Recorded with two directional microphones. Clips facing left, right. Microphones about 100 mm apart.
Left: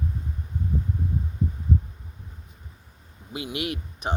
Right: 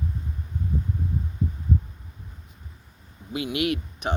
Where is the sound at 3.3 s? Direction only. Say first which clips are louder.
Right 5 dB; 30° left (ahead or behind).